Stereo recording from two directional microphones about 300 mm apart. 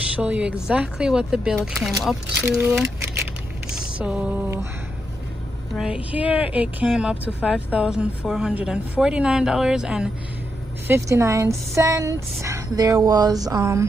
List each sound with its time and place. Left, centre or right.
0.1 s speech: centre
4.0 s speech: centre
5.8 s a woman's voice: centre